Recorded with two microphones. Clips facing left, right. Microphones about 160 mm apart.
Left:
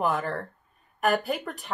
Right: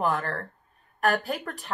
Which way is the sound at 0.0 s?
Centre (ahead or behind).